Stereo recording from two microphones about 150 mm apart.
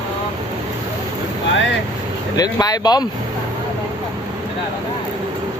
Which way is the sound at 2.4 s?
25° left (ahead or behind).